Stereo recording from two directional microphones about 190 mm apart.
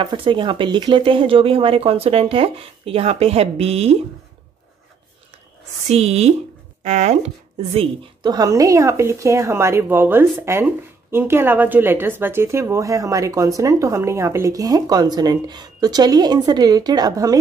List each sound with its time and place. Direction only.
0.0 s speech: 25° right (ahead or behind)
5.9 s speech: 35° right (ahead or behind)
7.7 s speech: 25° right (ahead or behind)